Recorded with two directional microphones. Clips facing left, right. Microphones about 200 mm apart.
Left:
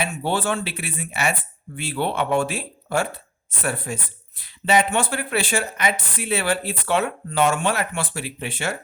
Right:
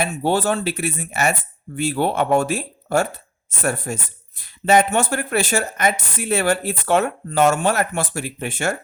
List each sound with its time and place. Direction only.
0.0 s speech: 40° right (ahead or behind)